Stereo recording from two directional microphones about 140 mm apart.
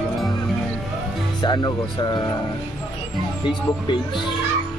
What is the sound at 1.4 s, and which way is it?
Speech, 30° left (ahead or behind).